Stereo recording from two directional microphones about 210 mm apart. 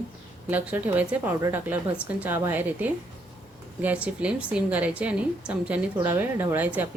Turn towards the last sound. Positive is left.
turn(degrees=-10)  # may be behind; listen again after turning